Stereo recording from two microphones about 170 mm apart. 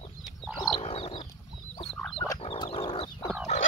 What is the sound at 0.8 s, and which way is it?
Frog, 35° left (ahead or behind).